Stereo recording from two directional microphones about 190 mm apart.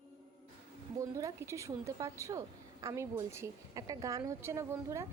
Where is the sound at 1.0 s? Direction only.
15° right (ahead or behind).